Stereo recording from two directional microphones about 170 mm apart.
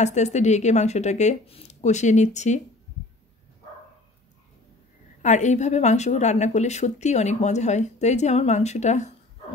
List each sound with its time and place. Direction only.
0.0 s a woman's voice: 40° left (ahead or behind)
5.2 s a woman's voice: 45° left (ahead or behind)